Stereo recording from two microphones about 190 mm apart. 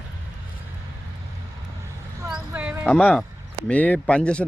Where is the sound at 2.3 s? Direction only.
5° right (ahead or behind).